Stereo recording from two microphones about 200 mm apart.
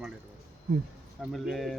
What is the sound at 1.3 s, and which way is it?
Speech, centre (ahead or behind).